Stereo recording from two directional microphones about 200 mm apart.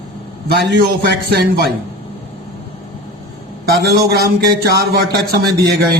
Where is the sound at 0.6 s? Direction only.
55° right (ahead or behind).